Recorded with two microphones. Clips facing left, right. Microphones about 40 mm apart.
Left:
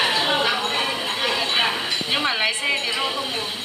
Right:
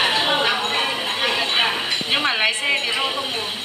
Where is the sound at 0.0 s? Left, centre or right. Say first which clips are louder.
Right 1 dB; centre.